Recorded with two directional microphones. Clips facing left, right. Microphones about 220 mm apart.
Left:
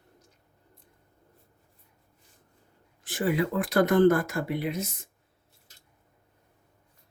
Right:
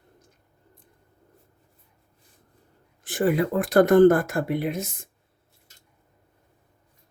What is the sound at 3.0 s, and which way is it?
Speech, 50° right (ahead or behind).